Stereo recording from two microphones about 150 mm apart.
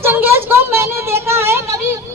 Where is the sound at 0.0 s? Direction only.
15° right (ahead or behind).